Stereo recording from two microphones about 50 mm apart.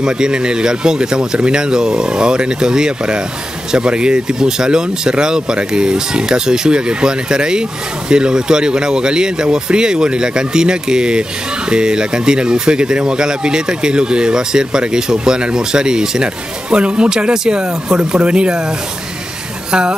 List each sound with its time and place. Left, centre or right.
0.0 s speech: centre